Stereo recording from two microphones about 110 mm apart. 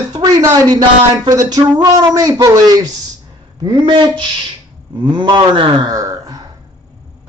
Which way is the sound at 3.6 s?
45° right (ahead or behind).